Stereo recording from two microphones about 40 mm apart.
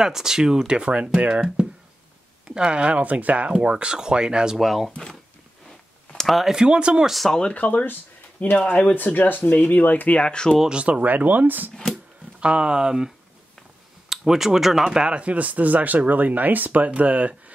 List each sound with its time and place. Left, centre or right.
0.0 s speech: centre; by 3.5 s right
3.5 s speech: right
4.6 s speech: centre
6.2 s speech: centre
6.5 s speech: right
7.2 s speech: centre
7.5 s speech: left
10.1 s speech: left
10.9 s speech: right
11.7 s speech: centre
12.4 s speech: right; by 15.0 s centre
15.0 s speech: right